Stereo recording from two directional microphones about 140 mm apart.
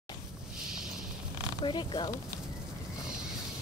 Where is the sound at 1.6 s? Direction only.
35° left (ahead or behind).